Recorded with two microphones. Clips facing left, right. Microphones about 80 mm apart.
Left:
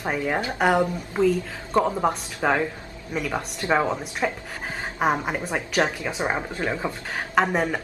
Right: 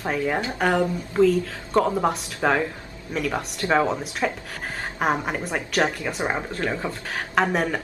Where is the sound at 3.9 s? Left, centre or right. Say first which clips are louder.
Right 1 dB; centre.